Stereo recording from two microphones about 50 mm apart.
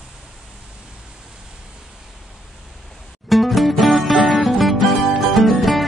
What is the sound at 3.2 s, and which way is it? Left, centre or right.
Music, centre.